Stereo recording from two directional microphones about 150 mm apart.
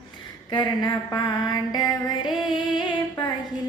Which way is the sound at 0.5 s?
30° left (ahead or behind).